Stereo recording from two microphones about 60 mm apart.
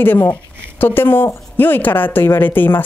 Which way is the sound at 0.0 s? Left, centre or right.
Left.